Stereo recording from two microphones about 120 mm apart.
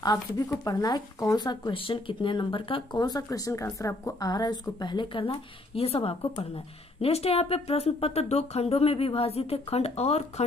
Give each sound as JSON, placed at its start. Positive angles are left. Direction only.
{"t": 0.7, "sound": "speech", "side_deg": 35}